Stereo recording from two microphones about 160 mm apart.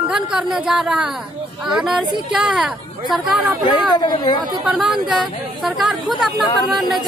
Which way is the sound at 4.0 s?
25° left (ahead or behind).